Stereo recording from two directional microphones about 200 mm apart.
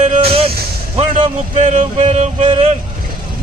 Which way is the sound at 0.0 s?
30° right (ahead or behind).